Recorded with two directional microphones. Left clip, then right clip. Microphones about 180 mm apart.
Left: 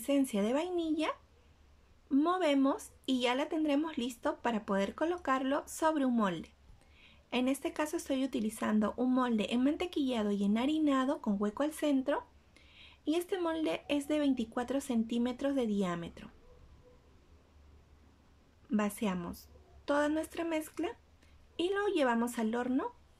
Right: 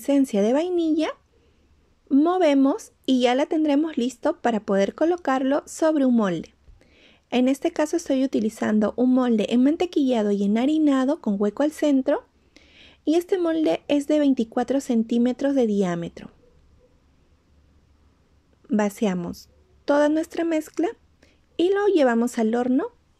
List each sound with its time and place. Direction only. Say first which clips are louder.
0.0 s speech: right 11 dB; 35° right (ahead or behind)
18.7 s a woman's voice: right 11 dB; 35° right (ahead or behind)